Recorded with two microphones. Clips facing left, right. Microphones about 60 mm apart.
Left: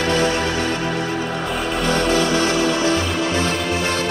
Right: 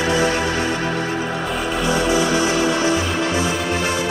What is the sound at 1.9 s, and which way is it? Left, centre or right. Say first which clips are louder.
Music: even; centre.